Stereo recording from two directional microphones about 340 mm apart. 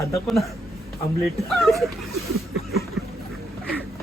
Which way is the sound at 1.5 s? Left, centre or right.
Centre.